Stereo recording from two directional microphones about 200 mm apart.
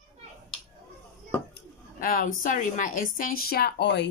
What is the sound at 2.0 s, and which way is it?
Speech, 45° left (ahead or behind).